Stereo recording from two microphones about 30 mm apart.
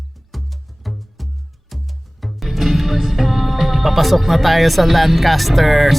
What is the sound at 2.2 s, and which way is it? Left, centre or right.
Music, centre.